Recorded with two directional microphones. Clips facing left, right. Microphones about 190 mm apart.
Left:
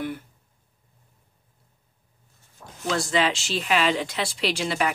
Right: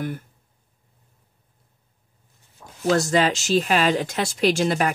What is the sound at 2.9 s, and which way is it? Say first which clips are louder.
Speech: right 4 dB; 45° right (ahead or behind).